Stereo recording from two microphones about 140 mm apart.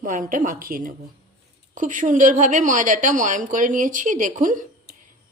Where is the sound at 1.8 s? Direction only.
70° right (ahead or behind).